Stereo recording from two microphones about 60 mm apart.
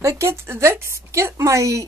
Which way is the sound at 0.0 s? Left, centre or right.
Right.